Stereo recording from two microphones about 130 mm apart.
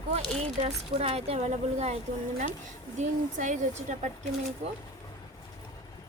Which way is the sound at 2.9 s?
70° right (ahead or behind).